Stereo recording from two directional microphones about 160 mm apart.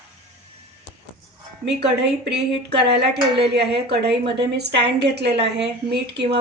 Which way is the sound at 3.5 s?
90° right.